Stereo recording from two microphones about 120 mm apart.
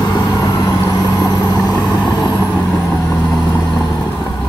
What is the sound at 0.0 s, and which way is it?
Vehicle, 30° left (ahead or behind).